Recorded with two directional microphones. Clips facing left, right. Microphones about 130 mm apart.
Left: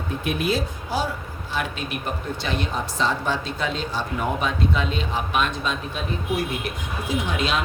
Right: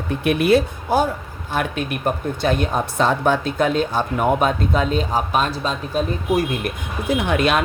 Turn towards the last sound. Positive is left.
turn(degrees=-60)  # may be behind; listen again after turning